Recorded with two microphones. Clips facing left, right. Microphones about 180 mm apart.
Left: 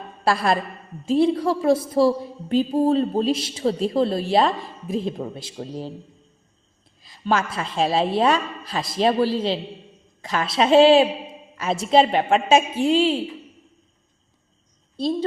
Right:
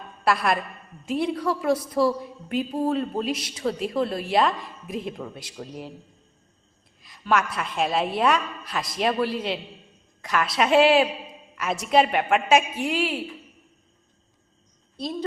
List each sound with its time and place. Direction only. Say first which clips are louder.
0.0 s a woman's voice: left 2 dB; 30° left (ahead or behind)
7.0 s a woman's voice: left 1 dB; 30° left (ahead or behind)
14.9 s a woman's voice: left 7 dB; 30° left (ahead or behind)